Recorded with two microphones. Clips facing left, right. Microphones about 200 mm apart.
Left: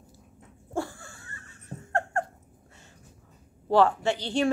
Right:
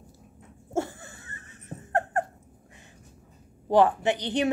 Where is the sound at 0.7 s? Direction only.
20° right (ahead or behind).